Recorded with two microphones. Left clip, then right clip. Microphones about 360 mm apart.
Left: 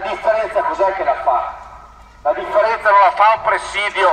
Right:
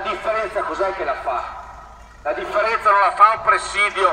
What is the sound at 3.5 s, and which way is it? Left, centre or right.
Speech, left.